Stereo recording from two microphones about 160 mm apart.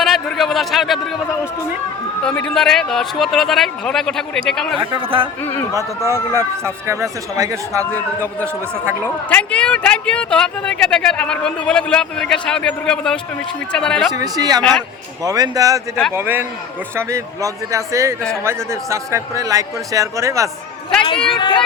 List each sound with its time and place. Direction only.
0.0 s a man's voice: centre (ahead or behind)
2.2 s speech: 5° left (ahead or behind)
4.8 s speech: 35° right (ahead or behind)
6.3 s a man's voice: 15° right (ahead or behind)
9.0 s speech: 10° left (ahead or behind)
14.1 s a man's voice: 25° right (ahead or behind)
14.6 s a man's voice: 5° left (ahead or behind)
15.2 s a man's voice: 20° right (ahead or behind)
21.0 s speech: 30° left (ahead or behind)